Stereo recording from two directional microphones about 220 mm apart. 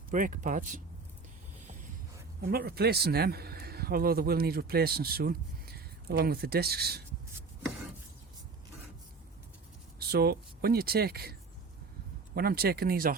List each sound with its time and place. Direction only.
0.1 s speech: 35° right (ahead or behind)
2.4 s a man's voice: 45° right (ahead or behind)
10.0 s a man's voice: 45° right (ahead or behind)